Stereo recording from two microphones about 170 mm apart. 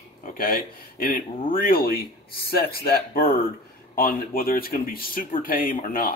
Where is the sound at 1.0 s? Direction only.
55° left (ahead or behind).